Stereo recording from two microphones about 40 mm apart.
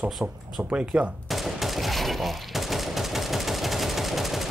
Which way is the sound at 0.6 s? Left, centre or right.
Right.